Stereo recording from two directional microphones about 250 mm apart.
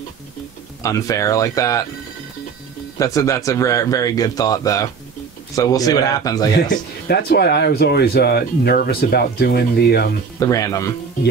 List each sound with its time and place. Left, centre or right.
0.8 s a man's voice: centre
3.0 s a man's voice: centre
6.5 s speech: left
10.4 s a man's voice: centre